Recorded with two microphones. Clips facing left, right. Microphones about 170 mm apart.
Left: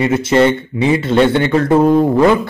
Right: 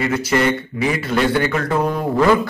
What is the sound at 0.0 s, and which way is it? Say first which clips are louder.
Speech: left 6 dB; 25° left (ahead or behind).